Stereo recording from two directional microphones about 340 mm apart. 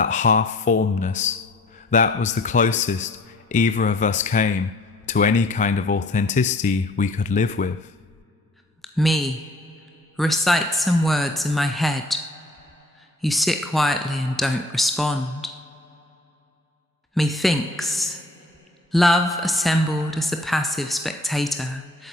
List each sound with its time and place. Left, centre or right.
0.0 s speech: left
8.8 s a woman's voice: centre
13.2 s a woman's voice: centre
17.2 s a woman's voice: centre